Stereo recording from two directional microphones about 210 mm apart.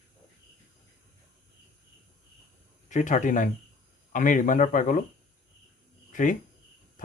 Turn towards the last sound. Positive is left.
turn(degrees=40)  # may be behind; listen again after turning